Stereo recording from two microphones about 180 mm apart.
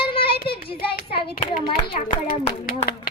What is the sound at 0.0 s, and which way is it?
Child singing, 30° left (ahead or behind).